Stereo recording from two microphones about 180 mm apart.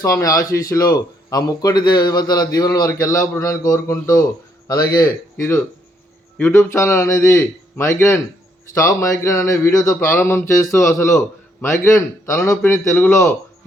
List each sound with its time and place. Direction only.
0.0 s a man's voice: 20° left (ahead or behind)